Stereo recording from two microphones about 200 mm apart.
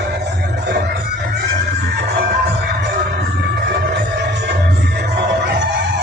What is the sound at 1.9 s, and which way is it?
Music, 50° right (ahead or behind).